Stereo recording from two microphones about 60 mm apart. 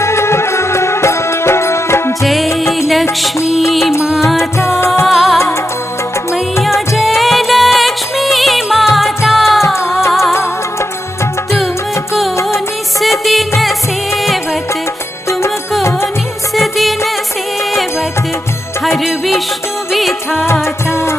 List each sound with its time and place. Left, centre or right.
0.0 s music: left
2.2 s music: centre
4.4 s music: left
5.0 s music: centre
6.9 s music of bollywood: centre
11.5 s music: centre
12.4 s music: left
13.0 s music of bollywood: centre
13.6 s music: centre
16.5 s music of bollywood: centre
19.0 s music: centre
20.6 s music: left